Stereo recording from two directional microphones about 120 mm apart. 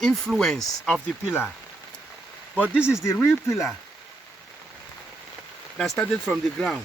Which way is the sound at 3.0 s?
20° left (ahead or behind).